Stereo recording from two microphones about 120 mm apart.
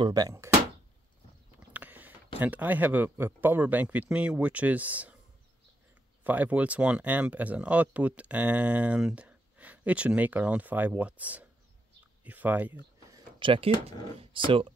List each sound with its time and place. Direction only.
0.0 s speech: 30° right (ahead or behind)
1.7 s a sound: 15° right (ahead or behind)
2.4 s speech: 15° right (ahead or behind)
6.2 s speech: 15° right (ahead or behind)
13.4 s speech: 45° right (ahead or behind)